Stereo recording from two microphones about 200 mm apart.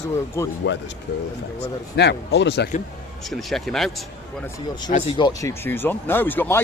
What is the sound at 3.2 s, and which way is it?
Speech, centre (ahead or behind).